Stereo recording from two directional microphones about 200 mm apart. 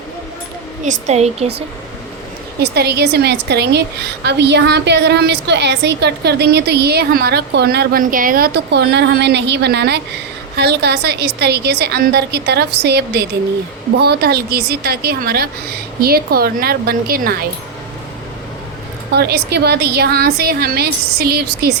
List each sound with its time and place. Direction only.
0.9 s speech: 35° right (ahead or behind)
2.6 s a woman's voice: 55° right (ahead or behind)
19.1 s a woman's voice: 55° right (ahead or behind)